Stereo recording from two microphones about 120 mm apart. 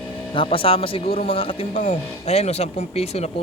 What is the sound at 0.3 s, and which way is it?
Speech, 50° left (ahead or behind).